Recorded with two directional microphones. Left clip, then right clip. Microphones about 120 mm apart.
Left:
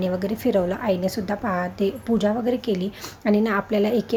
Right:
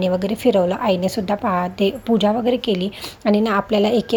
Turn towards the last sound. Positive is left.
turn(degrees=-20)  # may be behind; listen again after turning